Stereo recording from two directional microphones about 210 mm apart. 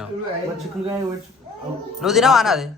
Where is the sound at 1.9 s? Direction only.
Centre (ahead or behind).